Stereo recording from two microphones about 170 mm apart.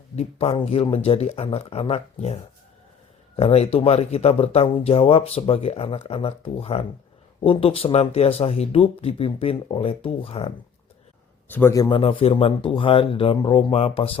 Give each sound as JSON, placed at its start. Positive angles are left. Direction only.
{"t": 0.2, "sound": "speech", "side_deg": 35}
{"t": 11.4, "sound": "a man's voice", "side_deg": 10}
{"t": 11.9, "sound": "speech", "side_deg": 35}